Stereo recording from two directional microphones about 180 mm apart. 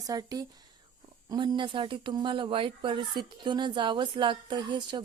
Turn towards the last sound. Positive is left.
turn(degrees=-25)  # may be behind; listen again after turning